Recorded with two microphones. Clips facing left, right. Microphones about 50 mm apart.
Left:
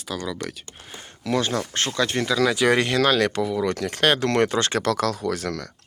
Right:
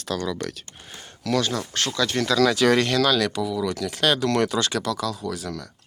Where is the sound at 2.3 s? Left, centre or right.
Centre.